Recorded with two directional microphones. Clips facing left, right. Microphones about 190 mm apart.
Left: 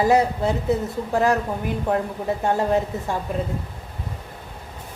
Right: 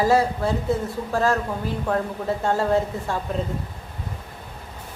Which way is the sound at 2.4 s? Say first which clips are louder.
Even; 15° left (ahead or behind).